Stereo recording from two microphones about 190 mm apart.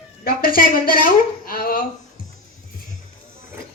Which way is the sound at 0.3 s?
50° left (ahead or behind).